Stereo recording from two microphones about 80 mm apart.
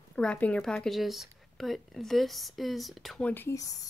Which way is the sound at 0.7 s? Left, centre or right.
Centre.